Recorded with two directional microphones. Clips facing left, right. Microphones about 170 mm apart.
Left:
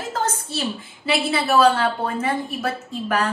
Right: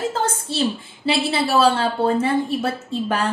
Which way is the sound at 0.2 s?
30° right (ahead or behind).